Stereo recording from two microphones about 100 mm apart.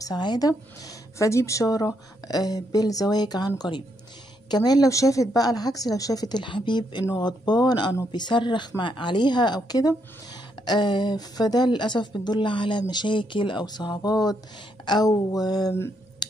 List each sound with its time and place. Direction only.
0.0 s speech: 45° left (ahead or behind)